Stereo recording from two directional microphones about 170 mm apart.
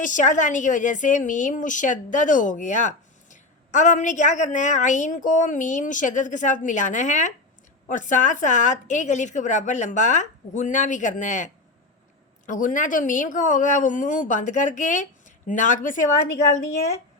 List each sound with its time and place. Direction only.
0.0 s a woman's voice: 50° left (ahead or behind)